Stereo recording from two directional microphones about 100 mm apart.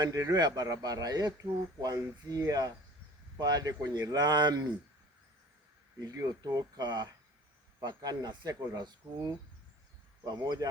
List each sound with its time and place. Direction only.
0.0 s speech: 35° right (ahead or behind)
6.0 s speech: 35° right (ahead or behind)